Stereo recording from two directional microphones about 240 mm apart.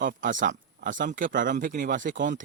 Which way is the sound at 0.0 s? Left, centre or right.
Right.